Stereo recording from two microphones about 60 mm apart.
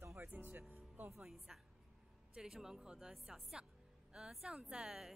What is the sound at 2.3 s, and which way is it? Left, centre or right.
A woman's voice, centre.